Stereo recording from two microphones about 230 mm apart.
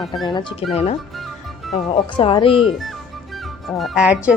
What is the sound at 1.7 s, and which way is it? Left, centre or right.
Speech, left.